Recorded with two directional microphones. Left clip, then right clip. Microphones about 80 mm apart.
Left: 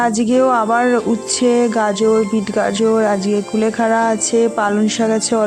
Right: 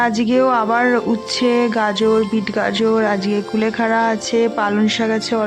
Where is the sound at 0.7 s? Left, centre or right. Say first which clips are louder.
Left 1 dB; centre.